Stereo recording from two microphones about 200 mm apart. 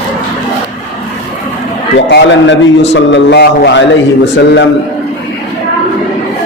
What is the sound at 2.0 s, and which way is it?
A man's voice, 60° left (ahead or behind).